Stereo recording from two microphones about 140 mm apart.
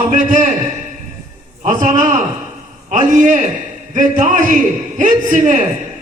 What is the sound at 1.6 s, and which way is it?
A man's voice, 70° right (ahead or behind).